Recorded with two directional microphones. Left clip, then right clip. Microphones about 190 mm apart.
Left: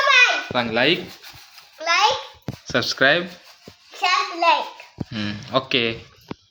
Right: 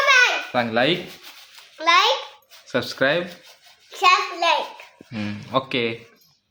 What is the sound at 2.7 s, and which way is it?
Speech, 5° left (ahead or behind).